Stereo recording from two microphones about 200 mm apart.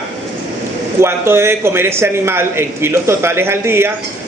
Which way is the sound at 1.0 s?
10° right (ahead or behind).